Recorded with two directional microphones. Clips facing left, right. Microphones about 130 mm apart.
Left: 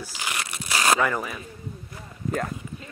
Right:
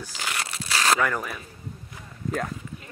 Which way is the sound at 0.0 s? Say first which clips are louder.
Even; 5° left (ahead or behind).